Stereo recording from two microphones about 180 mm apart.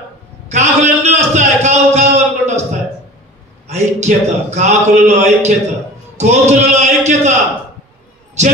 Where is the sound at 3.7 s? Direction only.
40° right (ahead or behind).